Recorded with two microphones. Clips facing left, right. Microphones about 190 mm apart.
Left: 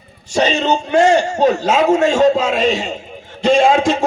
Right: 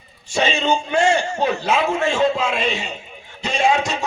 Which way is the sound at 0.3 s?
40° left (ahead or behind).